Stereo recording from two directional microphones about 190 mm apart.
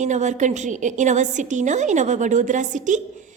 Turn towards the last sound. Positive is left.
turn(degrees=-40)  # may be behind; listen again after turning